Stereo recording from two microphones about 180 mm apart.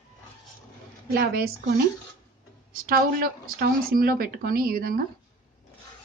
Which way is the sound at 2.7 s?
55° right (ahead or behind).